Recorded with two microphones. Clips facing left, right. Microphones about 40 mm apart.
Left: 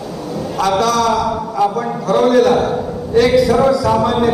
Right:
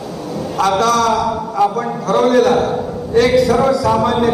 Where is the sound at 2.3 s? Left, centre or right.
Centre.